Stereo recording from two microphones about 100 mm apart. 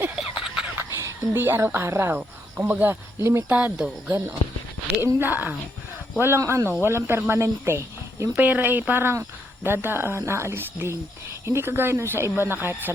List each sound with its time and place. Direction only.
0.3 s a sound: 5° right (ahead or behind)
0.8 s speech: 20° right (ahead or behind)
3.5 s speech: 10° right (ahead or behind)